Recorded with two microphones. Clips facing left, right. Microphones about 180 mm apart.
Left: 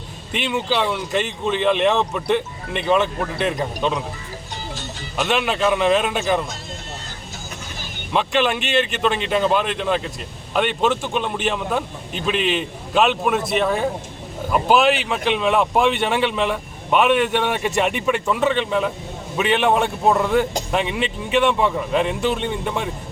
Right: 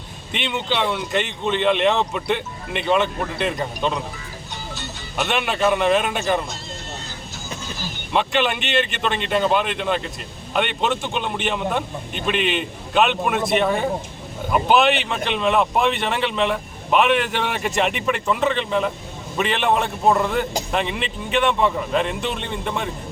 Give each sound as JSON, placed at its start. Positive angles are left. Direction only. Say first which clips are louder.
{"t": 0.3, "sound": "speech", "louder": "left 2 dB", "side_deg": 5}
{"t": 5.2, "sound": "speech", "louder": "left 1 dB", "side_deg": -5}
{"t": 8.1, "sound": "speech", "louder": "left 1 dB", "side_deg": 0}